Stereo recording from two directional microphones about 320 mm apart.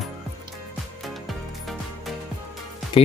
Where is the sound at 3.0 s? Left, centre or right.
Centre.